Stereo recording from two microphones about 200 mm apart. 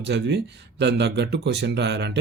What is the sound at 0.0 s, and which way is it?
Speech, 60° right (ahead or behind).